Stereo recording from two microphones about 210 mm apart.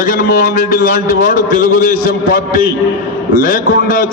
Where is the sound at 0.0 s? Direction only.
40° left (ahead or behind).